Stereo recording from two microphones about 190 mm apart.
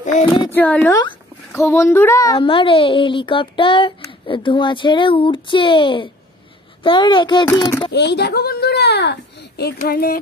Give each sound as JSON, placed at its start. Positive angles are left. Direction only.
{"t": 0.0, "sound": "speech", "side_deg": 40}
{"t": 0.5, "sound": "a child's voice", "side_deg": 10}
{"t": 2.3, "sound": "a child's voice", "side_deg": 25}
{"t": 7.9, "sound": "speech", "side_deg": 60}
{"t": 9.8, "sound": "a sound", "side_deg": 50}